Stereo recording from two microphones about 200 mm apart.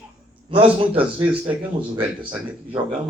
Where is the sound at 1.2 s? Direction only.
10° right (ahead or behind).